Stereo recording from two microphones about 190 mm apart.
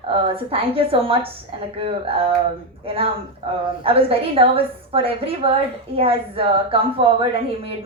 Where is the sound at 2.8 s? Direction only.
30° right (ahead or behind).